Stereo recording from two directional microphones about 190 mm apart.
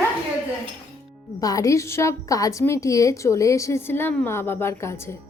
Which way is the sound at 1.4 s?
20° left (ahead or behind).